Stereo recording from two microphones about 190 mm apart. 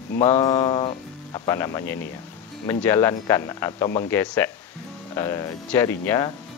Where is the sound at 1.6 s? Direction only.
15° left (ahead or behind).